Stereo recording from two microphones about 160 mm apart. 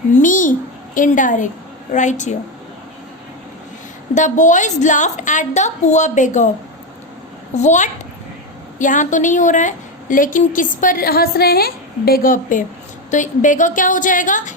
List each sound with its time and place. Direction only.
0.1 s a sound: 55° left (ahead or behind)
0.9 s a woman's voice: 55° left (ahead or behind)
4.1 s a woman's voice: 50° left (ahead or behind)
7.5 s a woman's voice: 45° left (ahead or behind)